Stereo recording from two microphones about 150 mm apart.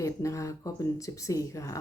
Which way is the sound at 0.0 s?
20° left (ahead or behind).